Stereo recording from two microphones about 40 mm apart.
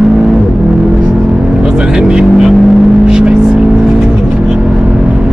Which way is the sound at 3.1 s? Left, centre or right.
Centre.